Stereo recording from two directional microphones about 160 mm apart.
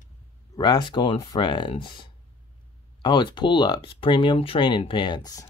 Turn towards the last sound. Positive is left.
turn(degrees=25)  # may be behind; listen again after turning